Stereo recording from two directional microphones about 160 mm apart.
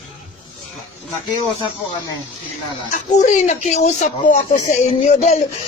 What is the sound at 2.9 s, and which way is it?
A child's voice, 50° left (ahead or behind).